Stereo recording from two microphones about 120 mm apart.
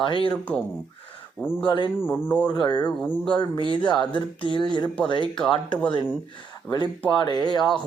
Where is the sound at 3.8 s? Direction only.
40° left (ahead or behind).